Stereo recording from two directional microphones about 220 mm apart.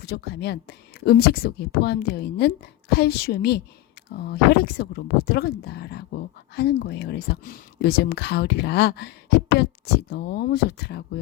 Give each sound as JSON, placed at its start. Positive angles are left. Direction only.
{"t": 0.0, "sound": "speech", "side_deg": 45}